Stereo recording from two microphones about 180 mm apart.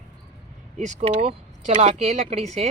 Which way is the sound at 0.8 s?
40° right (ahead or behind).